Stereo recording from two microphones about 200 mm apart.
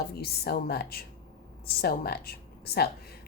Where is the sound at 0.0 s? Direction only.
50° left (ahead or behind).